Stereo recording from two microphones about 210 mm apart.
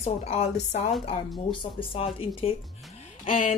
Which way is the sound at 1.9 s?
25° left (ahead or behind).